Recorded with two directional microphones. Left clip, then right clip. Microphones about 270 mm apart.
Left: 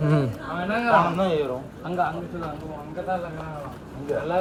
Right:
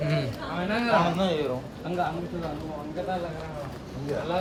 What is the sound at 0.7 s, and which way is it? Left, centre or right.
Speech, left.